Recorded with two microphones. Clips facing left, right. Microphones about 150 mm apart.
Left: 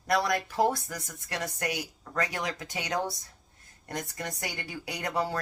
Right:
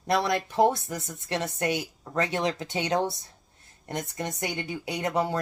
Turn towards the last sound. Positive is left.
turn(degrees=-20)  # may be behind; listen again after turning